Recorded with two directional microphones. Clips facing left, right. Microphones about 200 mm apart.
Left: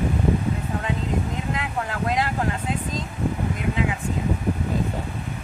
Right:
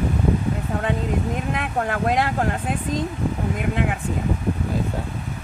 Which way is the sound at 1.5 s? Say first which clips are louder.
Right 4 dB; 60° right (ahead or behind).